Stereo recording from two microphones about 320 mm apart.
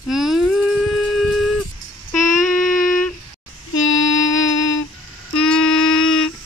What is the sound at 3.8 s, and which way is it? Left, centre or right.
Music, left.